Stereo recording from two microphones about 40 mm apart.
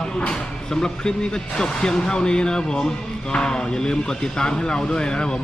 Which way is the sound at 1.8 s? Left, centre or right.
Centre.